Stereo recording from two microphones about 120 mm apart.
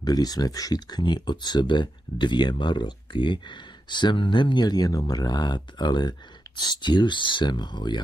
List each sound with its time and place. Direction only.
0.0 s speech: 35° left (ahead or behind)